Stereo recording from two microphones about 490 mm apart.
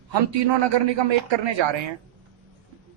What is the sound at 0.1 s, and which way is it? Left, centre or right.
A man's voice, right.